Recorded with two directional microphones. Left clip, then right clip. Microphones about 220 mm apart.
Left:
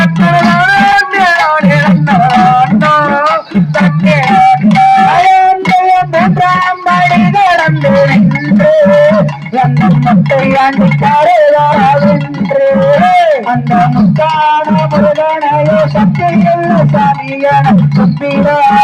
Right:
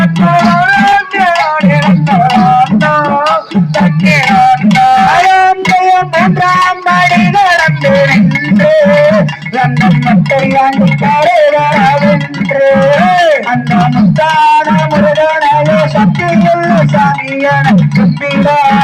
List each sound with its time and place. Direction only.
0.0 s music: 5° right (ahead or behind)
14.4 s music: 30° right (ahead or behind)